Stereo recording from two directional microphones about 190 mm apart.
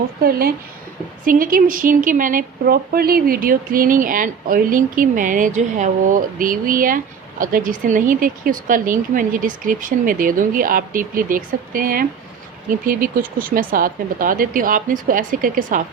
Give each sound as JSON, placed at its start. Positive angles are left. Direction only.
{"t": 0.2, "sound": "a woman's voice", "side_deg": -50}